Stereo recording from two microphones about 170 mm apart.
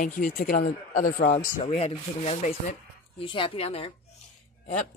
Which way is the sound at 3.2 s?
30° left (ahead or behind).